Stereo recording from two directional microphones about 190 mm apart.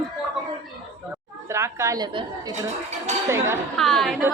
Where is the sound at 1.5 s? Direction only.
15° right (ahead or behind).